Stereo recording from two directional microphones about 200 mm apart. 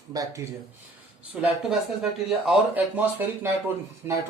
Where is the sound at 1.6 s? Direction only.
5° right (ahead or behind).